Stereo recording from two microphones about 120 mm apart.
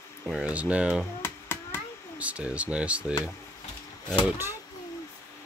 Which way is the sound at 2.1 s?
10° right (ahead or behind).